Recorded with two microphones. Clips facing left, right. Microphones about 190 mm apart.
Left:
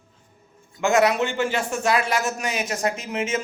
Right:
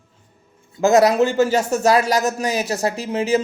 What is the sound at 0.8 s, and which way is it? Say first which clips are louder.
A man's voice: right 5 dB; 35° right (ahead or behind).